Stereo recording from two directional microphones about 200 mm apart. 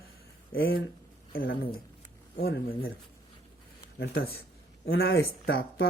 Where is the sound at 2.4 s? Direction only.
50° left (ahead or behind).